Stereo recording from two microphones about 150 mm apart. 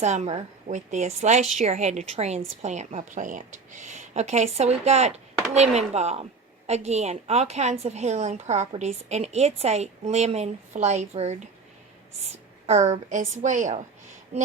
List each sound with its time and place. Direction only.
0.0 s a woman's voice: 45° right (ahead or behind)
12.6 s a woman's voice: 50° right (ahead or behind)